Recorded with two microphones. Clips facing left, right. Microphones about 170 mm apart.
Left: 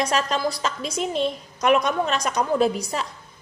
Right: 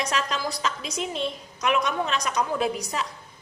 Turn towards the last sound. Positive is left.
turn(degrees=35)  # may be behind; listen again after turning